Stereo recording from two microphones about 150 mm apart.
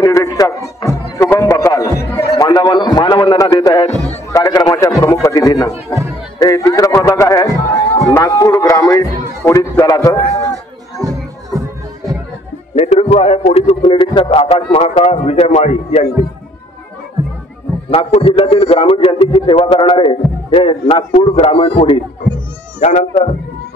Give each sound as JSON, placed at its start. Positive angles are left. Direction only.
{"t": 0.0, "sound": "music", "side_deg": 20}
{"t": 2.3, "sound": "a sound", "side_deg": 25}
{"t": 4.3, "sound": "a man's voice", "side_deg": 25}
{"t": 6.4, "sound": "music", "side_deg": 20}
{"t": 8.1, "sound": "a sound", "side_deg": 20}
{"t": 10.5, "sound": "music", "side_deg": -25}
{"t": 12.7, "sound": "a sound", "side_deg": 45}
{"t": 13.8, "sound": "a man's voice", "side_deg": 35}
{"t": 17.8, "sound": "a man's voice", "side_deg": 40}
{"t": 22.8, "sound": "a man's voice", "side_deg": 50}